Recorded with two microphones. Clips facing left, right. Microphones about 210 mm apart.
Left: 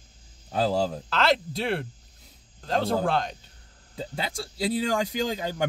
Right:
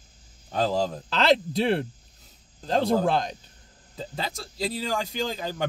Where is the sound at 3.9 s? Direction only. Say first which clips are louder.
Left 1 dB; 10° left (ahead or behind).